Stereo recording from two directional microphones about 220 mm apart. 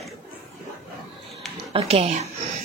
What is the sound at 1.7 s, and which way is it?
Speech, 25° right (ahead or behind).